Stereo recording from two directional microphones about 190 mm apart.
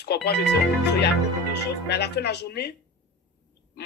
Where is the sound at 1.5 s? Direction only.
60° left (ahead or behind).